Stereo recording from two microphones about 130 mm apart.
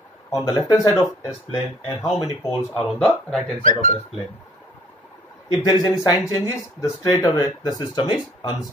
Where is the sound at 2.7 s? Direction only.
5° left (ahead or behind).